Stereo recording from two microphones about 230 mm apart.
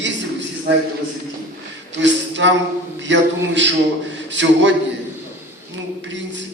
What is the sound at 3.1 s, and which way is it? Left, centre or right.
A man's voice, right.